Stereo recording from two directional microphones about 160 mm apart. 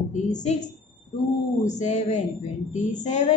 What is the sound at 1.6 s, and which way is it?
A woman's voice, 45° left (ahead or behind).